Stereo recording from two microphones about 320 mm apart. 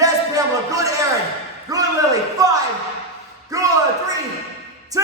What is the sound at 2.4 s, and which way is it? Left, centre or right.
Speech, centre.